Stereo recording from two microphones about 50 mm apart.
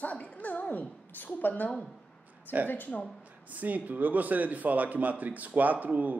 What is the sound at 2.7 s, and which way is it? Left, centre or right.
Speech, left.